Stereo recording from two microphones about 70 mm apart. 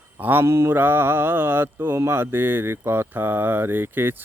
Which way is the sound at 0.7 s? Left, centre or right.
Right.